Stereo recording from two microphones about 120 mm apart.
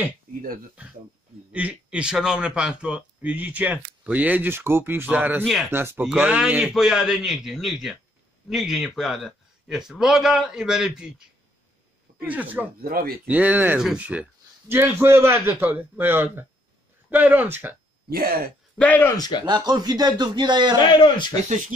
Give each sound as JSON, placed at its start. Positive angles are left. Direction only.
{"t": 1.5, "sound": "a man's voice", "side_deg": -10}
{"t": 5.4, "sound": "a man's voice", "side_deg": 0}
{"t": 5.7, "sound": "a man's voice", "side_deg": -20}
{"t": 12.2, "sound": "a man's voice", "side_deg": -15}
{"t": 18.8, "sound": "speech", "side_deg": 15}
{"t": 19.1, "sound": "speech", "side_deg": 35}
{"t": 19.4, "sound": "a man's voice", "side_deg": -35}
{"t": 20.8, "sound": "speech", "side_deg": 40}